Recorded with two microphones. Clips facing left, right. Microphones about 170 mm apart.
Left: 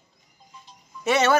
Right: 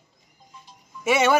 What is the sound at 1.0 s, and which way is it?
Speech, 10° right (ahead or behind).